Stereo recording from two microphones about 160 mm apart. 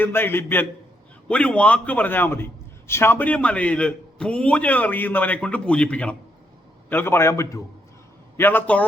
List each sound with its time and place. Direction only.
0.0 s a man's voice: 15° left (ahead or behind)